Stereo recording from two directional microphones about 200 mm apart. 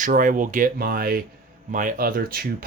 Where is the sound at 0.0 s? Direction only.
40° right (ahead or behind).